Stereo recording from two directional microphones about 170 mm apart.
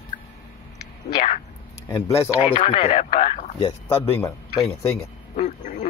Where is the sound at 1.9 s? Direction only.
15° left (ahead or behind).